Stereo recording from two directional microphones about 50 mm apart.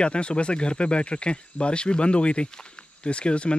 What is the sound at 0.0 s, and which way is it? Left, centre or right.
Speech, left.